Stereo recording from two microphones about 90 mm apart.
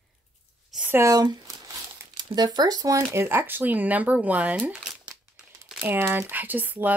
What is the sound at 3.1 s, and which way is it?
Speech, 25° right (ahead or behind).